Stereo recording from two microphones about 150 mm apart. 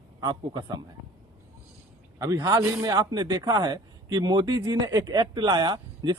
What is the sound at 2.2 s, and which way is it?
Speech, 25° right (ahead or behind).